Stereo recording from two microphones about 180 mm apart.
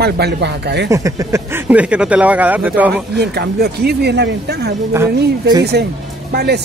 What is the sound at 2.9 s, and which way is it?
Speech, 60° right (ahead or behind).